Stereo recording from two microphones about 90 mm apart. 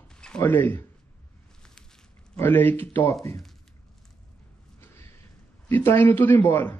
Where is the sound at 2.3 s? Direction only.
20° left (ahead or behind).